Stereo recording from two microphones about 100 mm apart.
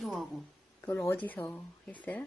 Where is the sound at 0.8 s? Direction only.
25° left (ahead or behind).